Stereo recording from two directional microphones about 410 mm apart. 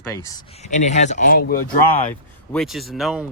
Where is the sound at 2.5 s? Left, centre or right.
Centre.